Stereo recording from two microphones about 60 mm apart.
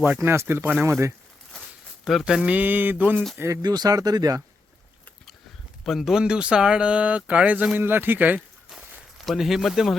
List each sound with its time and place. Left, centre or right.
0.2 s speech: right
2.2 s speech: centre
2.6 s a sound: right
3.4 s speech: right
5.8 s speech: centre; by 7.7 s right
7.8 s a sound: right
9.4 s speech: centre